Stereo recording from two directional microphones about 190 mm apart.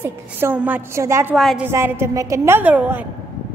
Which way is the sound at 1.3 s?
Centre (ahead or behind).